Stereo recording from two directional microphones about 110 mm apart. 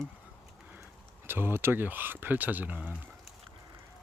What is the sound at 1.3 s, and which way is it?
Speech, 20° right (ahead or behind).